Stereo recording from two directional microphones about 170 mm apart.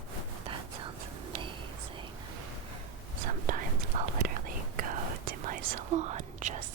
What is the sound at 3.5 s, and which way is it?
Whispering, 50° right (ahead or behind).